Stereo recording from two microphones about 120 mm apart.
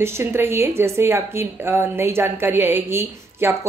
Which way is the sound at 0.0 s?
20° right (ahead or behind).